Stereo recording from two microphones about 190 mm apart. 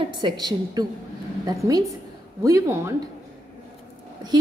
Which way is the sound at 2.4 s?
15° right (ahead or behind).